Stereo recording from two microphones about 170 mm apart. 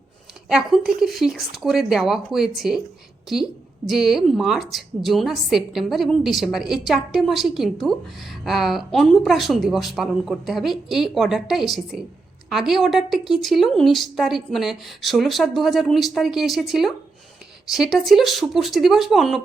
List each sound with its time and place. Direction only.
0.4 s a woman's voice: 5° right (ahead or behind)